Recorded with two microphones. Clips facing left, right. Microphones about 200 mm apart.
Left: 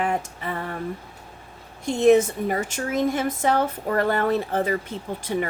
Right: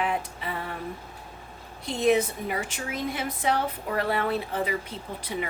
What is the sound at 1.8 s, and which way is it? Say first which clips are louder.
A woman's voice: left 6 dB; 45° left (ahead or behind).